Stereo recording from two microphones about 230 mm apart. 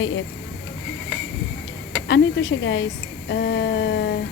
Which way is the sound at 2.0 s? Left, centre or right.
Left.